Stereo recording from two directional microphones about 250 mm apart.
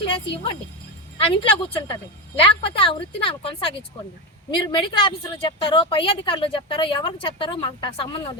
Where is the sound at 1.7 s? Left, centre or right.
Left.